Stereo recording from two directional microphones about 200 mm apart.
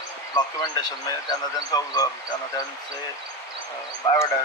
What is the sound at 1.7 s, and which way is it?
Speech, 20° left (ahead or behind).